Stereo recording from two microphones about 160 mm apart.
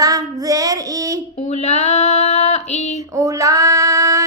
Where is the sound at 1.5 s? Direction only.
45° left (ahead or behind).